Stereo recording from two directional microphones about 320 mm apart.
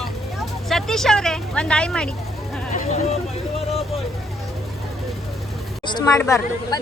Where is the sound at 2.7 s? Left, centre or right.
Left.